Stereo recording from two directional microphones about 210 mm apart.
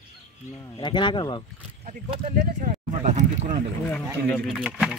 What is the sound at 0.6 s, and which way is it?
Speech, 20° left (ahead or behind).